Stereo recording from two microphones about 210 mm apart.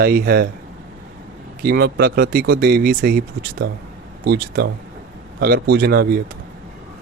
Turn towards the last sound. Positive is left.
turn(degrees=-45)  # may be behind; listen again after turning